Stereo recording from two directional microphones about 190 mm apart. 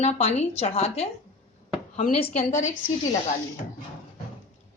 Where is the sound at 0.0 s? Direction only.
30° left (ahead or behind).